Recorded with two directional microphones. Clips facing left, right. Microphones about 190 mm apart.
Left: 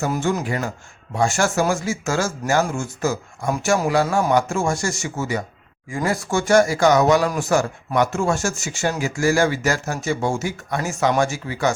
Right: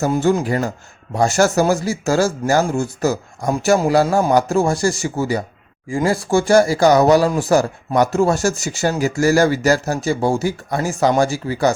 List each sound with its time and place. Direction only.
0.0 s speech: 35° right (ahead or behind)